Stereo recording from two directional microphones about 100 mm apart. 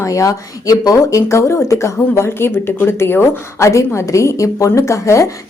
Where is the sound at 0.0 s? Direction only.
30° left (ahead or behind).